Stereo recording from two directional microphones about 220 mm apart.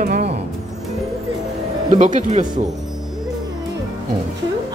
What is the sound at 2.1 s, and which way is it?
Speech, 30° right (ahead or behind).